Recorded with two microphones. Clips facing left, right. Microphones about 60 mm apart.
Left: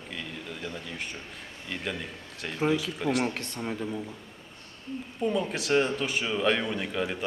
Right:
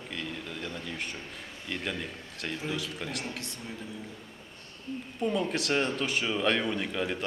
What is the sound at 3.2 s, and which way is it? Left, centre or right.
Speech, left.